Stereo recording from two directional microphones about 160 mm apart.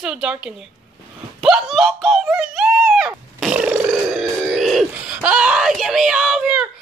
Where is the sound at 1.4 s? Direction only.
5° right (ahead or behind).